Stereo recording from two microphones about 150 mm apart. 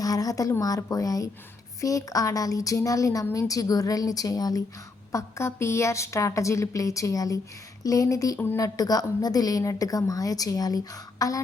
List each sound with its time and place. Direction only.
0.0 s a woman's voice: 25° left (ahead or behind)